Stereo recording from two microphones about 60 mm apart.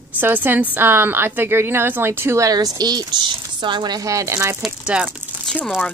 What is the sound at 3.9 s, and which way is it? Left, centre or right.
Speech, right.